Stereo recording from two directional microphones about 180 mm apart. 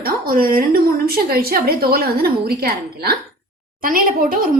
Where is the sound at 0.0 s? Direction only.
55° right (ahead or behind).